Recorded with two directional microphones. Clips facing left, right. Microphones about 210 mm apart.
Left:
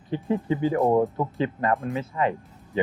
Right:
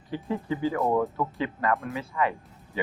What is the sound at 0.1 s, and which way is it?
Speech, 20° left (ahead or behind).